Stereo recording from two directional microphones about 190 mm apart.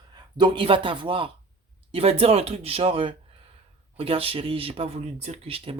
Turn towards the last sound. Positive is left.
turn(degrees=-30)  # may be behind; listen again after turning